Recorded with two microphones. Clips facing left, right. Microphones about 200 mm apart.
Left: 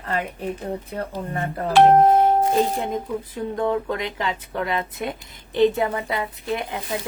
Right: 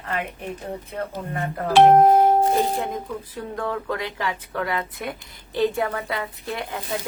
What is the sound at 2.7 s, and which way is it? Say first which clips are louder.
Speech: left 2 dB; 25° left (ahead or behind).